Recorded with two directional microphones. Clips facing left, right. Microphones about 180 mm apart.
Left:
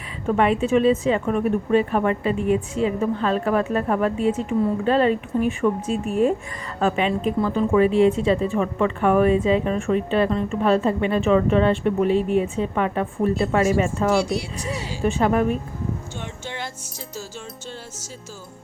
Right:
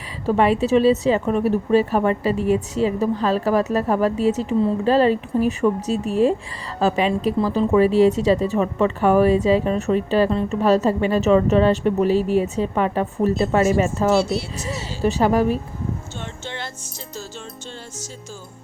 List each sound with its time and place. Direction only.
0.3 s speech: 35° right (ahead or behind)
14.1 s speech: 15° left (ahead or behind)
15.0 s speech: 35° right (ahead or behind)
16.5 s speech: 10° left (ahead or behind)